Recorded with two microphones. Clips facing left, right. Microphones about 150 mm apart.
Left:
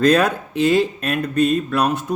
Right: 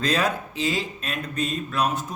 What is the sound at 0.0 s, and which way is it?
Speech, 60° left (ahead or behind).